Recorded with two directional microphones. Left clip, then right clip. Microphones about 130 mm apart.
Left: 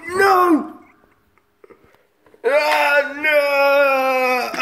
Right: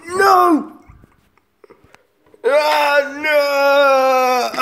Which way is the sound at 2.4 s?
25° right (ahead or behind).